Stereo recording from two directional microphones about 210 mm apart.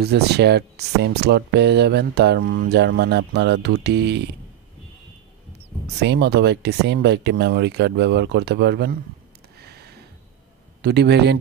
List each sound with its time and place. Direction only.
0.0 s speech: 50° right (ahead or behind)
5.9 s speech: 55° right (ahead or behind)
9.6 s a sound: 50° right (ahead or behind)
10.8 s speech: 50° right (ahead or behind)